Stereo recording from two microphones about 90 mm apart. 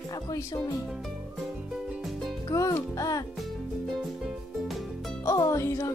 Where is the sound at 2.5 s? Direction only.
40° left (ahead or behind).